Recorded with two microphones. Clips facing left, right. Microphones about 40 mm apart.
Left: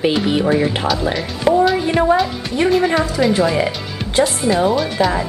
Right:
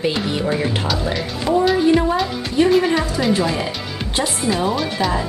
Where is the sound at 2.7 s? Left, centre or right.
Centre.